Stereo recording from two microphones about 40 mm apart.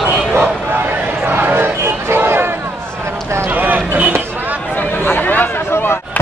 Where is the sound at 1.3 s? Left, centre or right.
Right.